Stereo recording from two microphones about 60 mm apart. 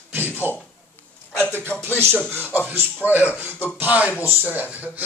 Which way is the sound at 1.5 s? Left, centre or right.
Left.